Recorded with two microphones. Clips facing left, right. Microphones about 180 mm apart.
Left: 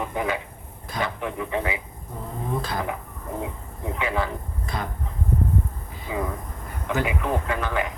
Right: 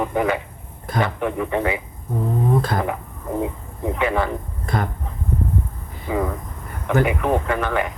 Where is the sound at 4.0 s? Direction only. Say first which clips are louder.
Right 5 dB; 55° right (ahead or behind).